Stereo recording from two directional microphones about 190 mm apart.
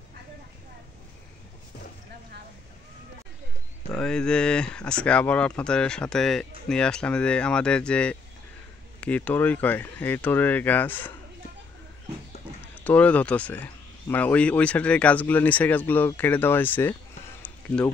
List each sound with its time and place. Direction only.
3.9 s speech: 5° left (ahead or behind)
12.7 s speech: 10° left (ahead or behind)
17.4 s a sound: 5° left (ahead or behind)